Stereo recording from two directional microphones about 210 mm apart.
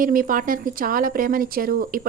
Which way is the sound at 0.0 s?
40° right (ahead or behind).